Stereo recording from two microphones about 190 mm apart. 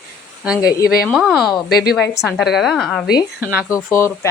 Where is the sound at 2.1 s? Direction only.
15° left (ahead or behind).